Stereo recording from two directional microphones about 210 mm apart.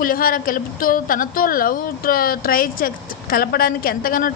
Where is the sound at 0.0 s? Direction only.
40° left (ahead or behind).